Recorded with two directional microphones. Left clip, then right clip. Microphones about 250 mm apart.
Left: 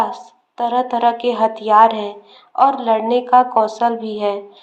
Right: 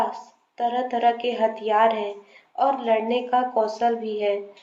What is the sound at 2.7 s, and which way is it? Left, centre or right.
Speech, left.